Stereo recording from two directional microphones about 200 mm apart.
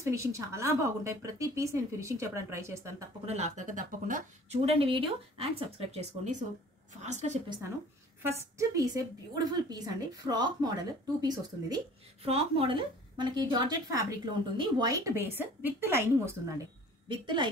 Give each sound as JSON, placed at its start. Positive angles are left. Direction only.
{"t": 0.0, "sound": "speech", "side_deg": -15}
{"t": 3.3, "sound": "speech", "side_deg": -35}
{"t": 8.2, "sound": "a woman's voice", "side_deg": -15}
{"t": 17.1, "sound": "a woman's voice", "side_deg": -25}